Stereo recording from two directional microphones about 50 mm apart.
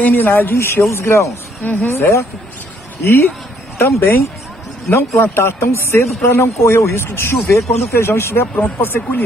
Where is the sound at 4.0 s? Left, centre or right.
Left.